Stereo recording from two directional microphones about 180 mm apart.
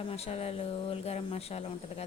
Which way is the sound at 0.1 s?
35° left (ahead or behind).